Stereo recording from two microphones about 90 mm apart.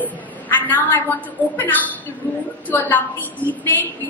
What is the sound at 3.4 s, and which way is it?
Speech, 20° left (ahead or behind).